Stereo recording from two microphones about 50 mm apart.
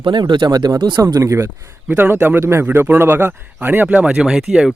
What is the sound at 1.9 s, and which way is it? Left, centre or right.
Speech, right.